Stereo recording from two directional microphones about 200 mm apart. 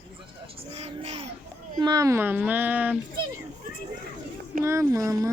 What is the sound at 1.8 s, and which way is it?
Speech, 15° right (ahead or behind).